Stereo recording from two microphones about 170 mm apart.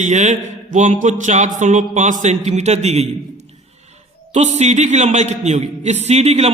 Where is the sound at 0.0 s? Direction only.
45° right (ahead or behind).